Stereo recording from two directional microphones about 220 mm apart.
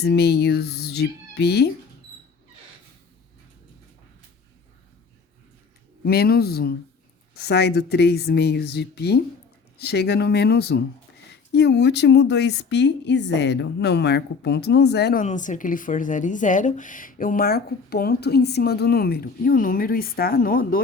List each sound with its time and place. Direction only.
0.0 s speech: 50° left (ahead or behind)
6.1 s speech: 45° left (ahead or behind)
15.2 s speech: 35° left (ahead or behind)